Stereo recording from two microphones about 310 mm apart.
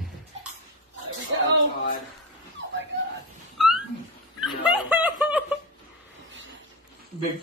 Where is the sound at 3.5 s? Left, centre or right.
Centre.